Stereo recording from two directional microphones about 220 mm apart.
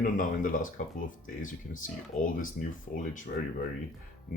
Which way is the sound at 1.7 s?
35° left (ahead or behind).